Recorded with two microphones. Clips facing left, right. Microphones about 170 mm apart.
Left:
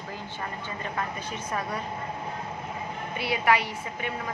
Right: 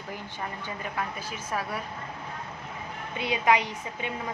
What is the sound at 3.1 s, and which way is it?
A woman's voice, 20° right (ahead or behind).